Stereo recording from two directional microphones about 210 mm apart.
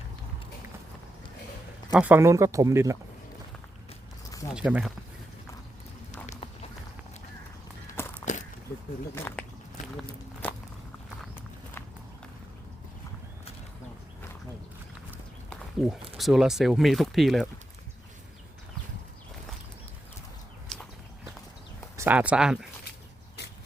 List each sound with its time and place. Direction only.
1.9 s speech: 10° right (ahead or behind)
4.5 s speech: 5° right (ahead or behind)
6.2 s run: 30° left (ahead or behind)
8.2 s walk: 35° left (ahead or behind)
9.1 s speech: 10° left (ahead or behind)
10.4 s walk: 5° left (ahead or behind)
15.8 s speech: centre (ahead or behind)
20.7 s walk: centre (ahead or behind)
21.9 s speech: 10° right (ahead or behind)